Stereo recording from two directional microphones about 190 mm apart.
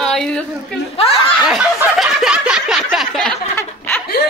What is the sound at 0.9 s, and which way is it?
Snicker, 30° left (ahead or behind).